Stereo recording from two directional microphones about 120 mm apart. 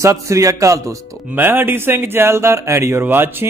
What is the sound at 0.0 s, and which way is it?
A man's voice, 25° right (ahead or behind).